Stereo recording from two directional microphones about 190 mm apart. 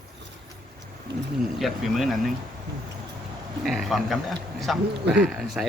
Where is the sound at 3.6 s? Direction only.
Centre (ahead or behind).